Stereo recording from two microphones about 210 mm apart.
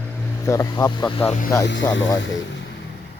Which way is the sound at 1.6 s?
60° left (ahead or behind).